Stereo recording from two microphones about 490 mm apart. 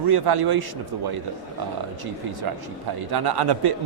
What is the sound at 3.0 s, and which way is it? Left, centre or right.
Speech, right.